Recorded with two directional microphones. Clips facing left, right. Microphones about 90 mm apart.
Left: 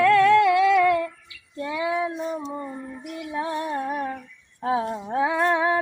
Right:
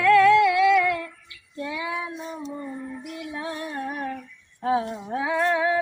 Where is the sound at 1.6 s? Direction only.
30° left (ahead or behind).